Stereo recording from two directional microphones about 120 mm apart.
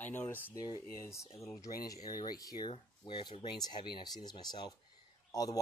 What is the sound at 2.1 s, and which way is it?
Speech, 35° left (ahead or behind).